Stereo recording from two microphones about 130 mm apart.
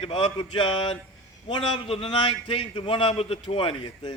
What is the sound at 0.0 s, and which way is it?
A man's voice, 40° left (ahead or behind).